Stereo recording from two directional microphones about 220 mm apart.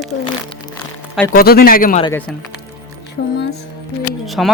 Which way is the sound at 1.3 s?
45° left (ahead or behind).